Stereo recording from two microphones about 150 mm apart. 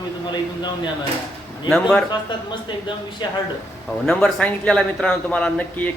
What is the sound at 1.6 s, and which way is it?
Speech, 5° left (ahead or behind).